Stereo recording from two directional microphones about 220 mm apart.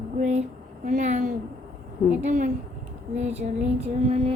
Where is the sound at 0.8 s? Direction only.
35° right (ahead or behind).